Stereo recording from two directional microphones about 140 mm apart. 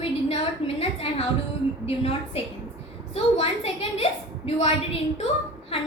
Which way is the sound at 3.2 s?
45° left (ahead or behind).